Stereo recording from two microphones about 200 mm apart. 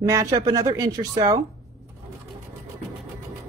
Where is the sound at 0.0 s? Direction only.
15° right (ahead or behind).